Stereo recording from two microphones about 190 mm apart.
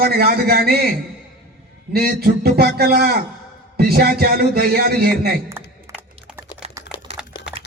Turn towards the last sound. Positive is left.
turn(degrees=-5)  # may be behind; listen again after turning